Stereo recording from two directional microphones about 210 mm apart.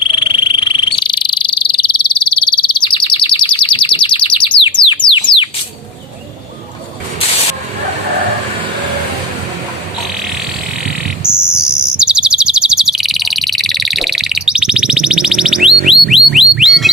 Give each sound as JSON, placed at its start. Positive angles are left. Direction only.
{"t": 0.1, "sound": "frog", "side_deg": 25}
{"t": 5.0, "sound": "a sound", "side_deg": 25}
{"t": 11.2, "sound": "bird", "side_deg": -5}
{"t": 15.9, "sound": "music", "side_deg": 0}